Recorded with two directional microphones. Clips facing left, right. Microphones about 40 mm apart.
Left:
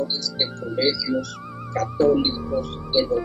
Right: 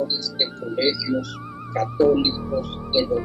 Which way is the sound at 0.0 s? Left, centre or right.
Right.